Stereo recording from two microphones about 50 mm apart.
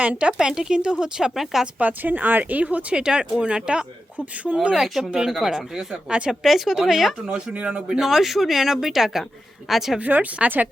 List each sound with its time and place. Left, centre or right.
0.0 s speech: right
1.8 s speech: right
2.9 s speech: centre
6.4 s speech: centre
7.3 s speech: right
7.9 s speech: centre
10.0 s speech: right